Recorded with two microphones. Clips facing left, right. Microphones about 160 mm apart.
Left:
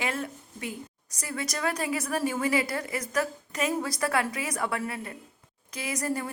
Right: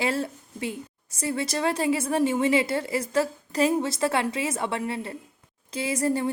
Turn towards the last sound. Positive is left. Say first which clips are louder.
# right 6 dB
turn(degrees=-25)  # may be behind; listen again after turning